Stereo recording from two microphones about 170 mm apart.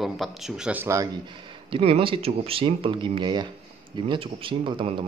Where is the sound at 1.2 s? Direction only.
30° right (ahead or behind).